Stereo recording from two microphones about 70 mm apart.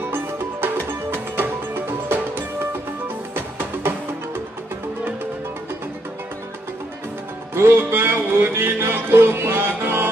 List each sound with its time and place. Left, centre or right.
0.1 s music: right
7.5 s music: right